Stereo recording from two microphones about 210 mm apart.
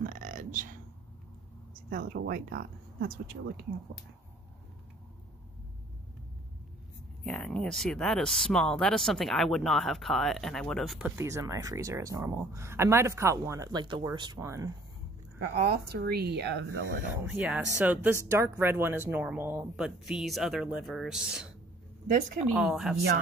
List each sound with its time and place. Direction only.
0.0 s a sound: 40° right (ahead or behind)
1.9 s speech: 45° right (ahead or behind)
7.2 s speech: 5° left (ahead or behind)
11.1 s speech: 15° right (ahead or behind)
15.5 s speech: 50° right (ahead or behind)
17.1 s speech: 10° right (ahead or behind)
22.0 s speech: 40° right (ahead or behind)
22.5 s speech: centre (ahead or behind)